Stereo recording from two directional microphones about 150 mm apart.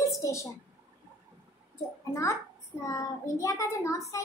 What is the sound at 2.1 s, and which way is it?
A child's voice, 20° left (ahead or behind).